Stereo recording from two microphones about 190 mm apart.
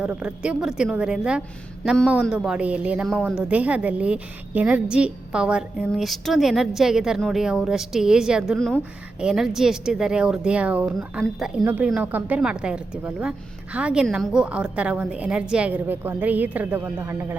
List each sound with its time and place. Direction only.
0.0 s a woman's voice: 5° right (ahead or behind)